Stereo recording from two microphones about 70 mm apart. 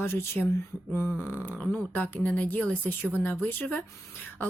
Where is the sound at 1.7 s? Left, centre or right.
Left.